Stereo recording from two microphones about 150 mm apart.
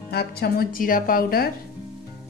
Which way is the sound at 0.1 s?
90° left.